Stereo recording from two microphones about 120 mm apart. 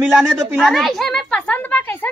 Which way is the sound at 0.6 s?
Centre (ahead or behind).